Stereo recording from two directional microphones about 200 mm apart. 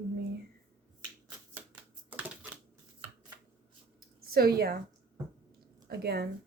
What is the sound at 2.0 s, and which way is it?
Typewriter, 5° right (ahead or behind).